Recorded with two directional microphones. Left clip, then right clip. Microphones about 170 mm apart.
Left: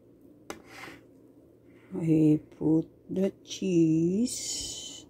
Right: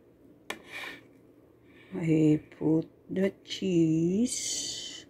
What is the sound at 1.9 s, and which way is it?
Speech, 10° left (ahead or behind).